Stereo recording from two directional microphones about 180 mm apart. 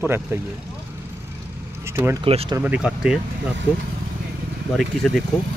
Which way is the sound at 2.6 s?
5° right (ahead or behind).